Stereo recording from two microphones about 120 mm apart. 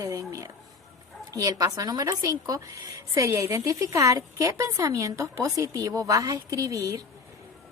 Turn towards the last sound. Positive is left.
turn(degrees=-30)  # may be behind; listen again after turning